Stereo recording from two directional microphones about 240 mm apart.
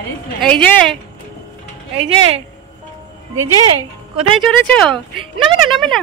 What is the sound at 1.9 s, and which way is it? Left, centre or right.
Speech, right.